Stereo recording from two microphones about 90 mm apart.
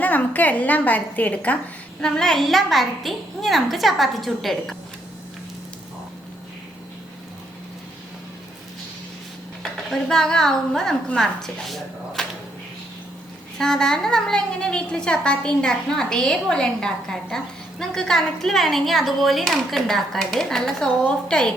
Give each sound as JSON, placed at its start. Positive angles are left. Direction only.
{"t": 0.0, "sound": "a woman's voice", "side_deg": 20}
{"t": 9.9, "sound": "a woman's voice", "side_deg": 5}
{"t": 13.6, "sound": "a woman's voice", "side_deg": 5}